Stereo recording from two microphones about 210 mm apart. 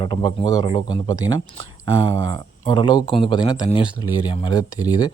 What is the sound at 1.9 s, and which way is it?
Speech, 70° right (ahead or behind).